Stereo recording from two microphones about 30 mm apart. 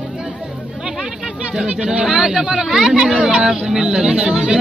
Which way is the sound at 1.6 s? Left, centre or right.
Right.